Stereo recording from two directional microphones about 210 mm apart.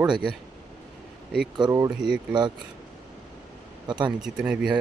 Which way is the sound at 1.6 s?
20° right (ahead or behind).